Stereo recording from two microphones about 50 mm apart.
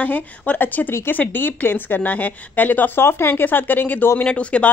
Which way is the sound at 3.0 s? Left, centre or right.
Left.